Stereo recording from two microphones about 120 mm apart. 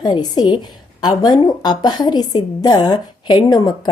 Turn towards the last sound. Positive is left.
turn(degrees=35)  # may be behind; listen again after turning